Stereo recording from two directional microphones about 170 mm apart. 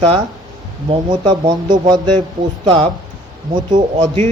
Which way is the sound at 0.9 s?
25° right (ahead or behind).